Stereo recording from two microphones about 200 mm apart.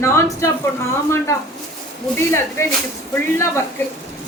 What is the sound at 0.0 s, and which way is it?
Speech, 15° left (ahead or behind).